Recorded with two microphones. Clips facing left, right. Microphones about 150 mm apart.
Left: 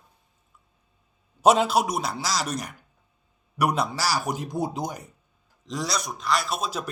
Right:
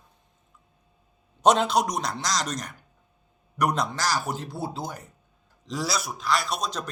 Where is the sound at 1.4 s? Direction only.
5° left (ahead or behind).